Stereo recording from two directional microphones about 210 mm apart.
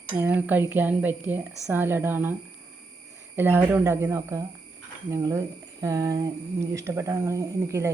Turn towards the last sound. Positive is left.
turn(degrees=-15)  # may be behind; listen again after turning